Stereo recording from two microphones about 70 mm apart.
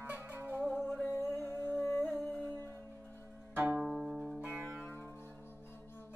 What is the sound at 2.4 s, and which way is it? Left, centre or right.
Music, left.